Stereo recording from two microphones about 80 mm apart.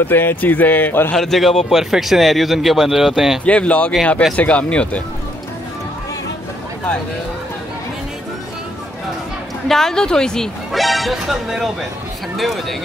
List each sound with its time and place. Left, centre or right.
0.0 s speech: left
1.1 s speech: centre
3.4 s speech: centre
9.7 s speech: centre